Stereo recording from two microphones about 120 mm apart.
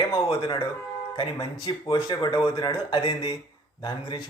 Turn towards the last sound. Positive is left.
turn(degrees=40)  # may be behind; listen again after turning